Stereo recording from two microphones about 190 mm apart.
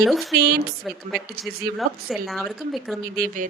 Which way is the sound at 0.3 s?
55° right (ahead or behind).